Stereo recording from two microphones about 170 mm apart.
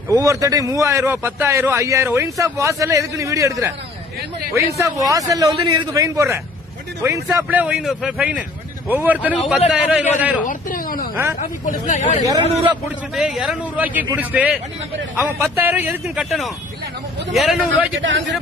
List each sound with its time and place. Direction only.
0.1 s a man's voice: 20° right (ahead or behind)
10.4 s a sound: 55° left (ahead or behind)
11.3 s speech: 50° left (ahead or behind)
12.5 s a man's voice: 35° right (ahead or behind)
13.1 s a man's voice: centre (ahead or behind)
18.0 s speech: 90° right